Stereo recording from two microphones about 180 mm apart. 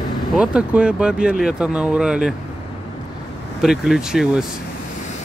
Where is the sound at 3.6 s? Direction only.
Centre (ahead or behind).